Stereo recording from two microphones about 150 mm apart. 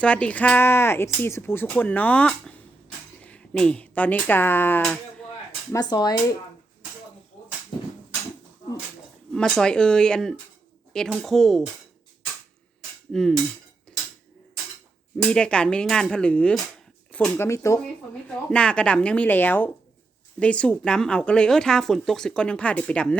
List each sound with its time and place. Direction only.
0.0 s speech: 10° left (ahead or behind)
5.7 s speech: 25° left (ahead or behind)
9.3 s speech: 5° left (ahead or behind)
13.1 s speech: 5° left (ahead or behind)
13.9 s dishes: 5° left (ahead or behind)
15.3 s speech: 5° left (ahead or behind)
18.5 s speech: 5° left (ahead or behind)